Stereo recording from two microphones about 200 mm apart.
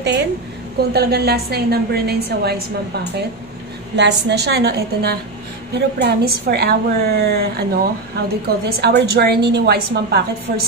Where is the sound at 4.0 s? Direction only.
60° right (ahead or behind).